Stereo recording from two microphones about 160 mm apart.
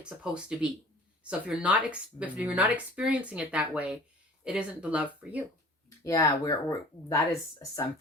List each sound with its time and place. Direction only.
0.0 s speech: 5° right (ahead or behind)
6.0 s speech: 20° left (ahead or behind)